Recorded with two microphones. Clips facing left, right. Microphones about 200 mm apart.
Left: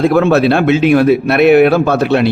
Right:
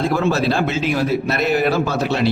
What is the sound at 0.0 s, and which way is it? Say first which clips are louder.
A man's voice: left 8 dB; 60° left (ahead or behind).